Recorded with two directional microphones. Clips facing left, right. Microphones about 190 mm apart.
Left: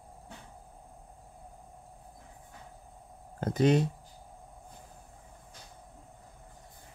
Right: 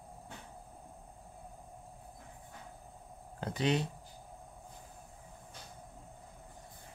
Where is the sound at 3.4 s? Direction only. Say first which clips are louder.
Left 7 dB; 45° left (ahead or behind).